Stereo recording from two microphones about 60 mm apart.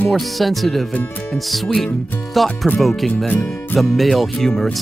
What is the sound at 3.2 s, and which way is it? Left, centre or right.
Speech, left.